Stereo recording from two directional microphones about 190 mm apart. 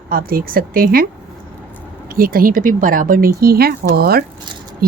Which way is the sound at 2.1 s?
50° right (ahead or behind).